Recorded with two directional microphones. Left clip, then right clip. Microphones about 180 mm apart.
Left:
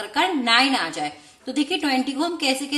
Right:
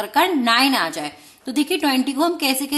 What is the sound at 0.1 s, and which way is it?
A woman's voice, 35° right (ahead or behind).